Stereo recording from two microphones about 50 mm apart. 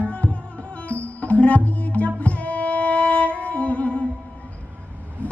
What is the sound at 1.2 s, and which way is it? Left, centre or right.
Music, left.